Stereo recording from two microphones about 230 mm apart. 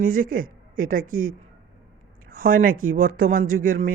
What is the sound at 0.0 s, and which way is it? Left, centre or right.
A woman's voice, right.